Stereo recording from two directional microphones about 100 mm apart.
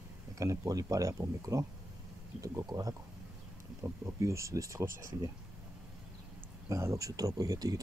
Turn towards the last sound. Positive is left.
turn(degrees=-40)  # may be behind; listen again after turning